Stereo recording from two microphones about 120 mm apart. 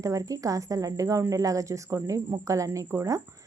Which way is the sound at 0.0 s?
30° right (ahead or behind).